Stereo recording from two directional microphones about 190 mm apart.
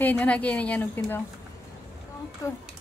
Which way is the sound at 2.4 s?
15° left (ahead or behind).